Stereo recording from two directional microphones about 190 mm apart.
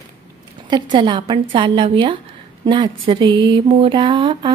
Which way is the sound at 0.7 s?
25° right (ahead or behind).